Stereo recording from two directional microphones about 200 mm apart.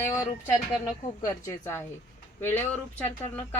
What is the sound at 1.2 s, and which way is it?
A woman's voice, 15° left (ahead or behind).